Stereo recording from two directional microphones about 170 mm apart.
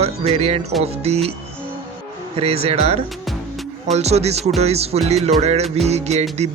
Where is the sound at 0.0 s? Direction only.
35° right (ahead or behind).